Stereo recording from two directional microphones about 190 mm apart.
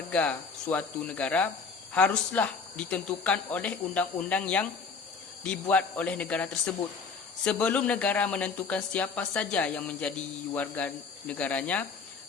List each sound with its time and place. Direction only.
0.1 s speech: 5° left (ahead or behind)